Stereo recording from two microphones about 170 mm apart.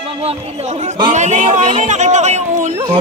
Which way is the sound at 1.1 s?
45° right (ahead or behind).